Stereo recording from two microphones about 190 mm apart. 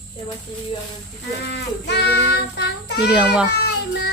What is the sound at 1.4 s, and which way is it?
Child singing, 60° left (ahead or behind).